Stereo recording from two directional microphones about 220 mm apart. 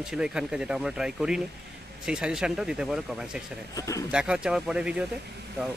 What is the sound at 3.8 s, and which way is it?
Speech, 15° left (ahead or behind).